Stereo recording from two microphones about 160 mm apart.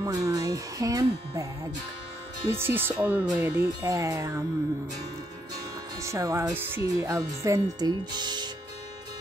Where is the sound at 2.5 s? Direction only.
15° right (ahead or behind).